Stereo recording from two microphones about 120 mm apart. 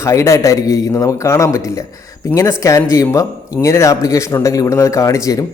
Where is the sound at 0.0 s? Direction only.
25° left (ahead or behind).